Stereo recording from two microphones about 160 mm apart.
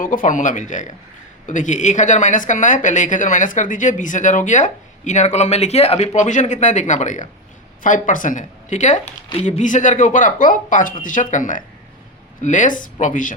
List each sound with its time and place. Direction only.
0.0 s a woman's voice: 55° left (ahead or behind)